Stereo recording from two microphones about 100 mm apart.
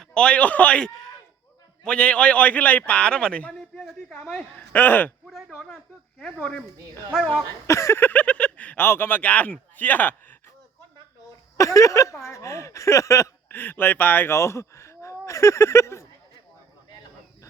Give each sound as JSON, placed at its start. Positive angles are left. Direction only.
{"t": 0.0, "sound": "a man's voice", "side_deg": 10}
{"t": 5.2, "sound": "speech", "side_deg": 5}
{"t": 7.7, "sound": "a man's voice", "side_deg": 30}
{"t": 11.5, "sound": "speech", "side_deg": 30}
{"t": 13.5, "sound": "speech", "side_deg": 20}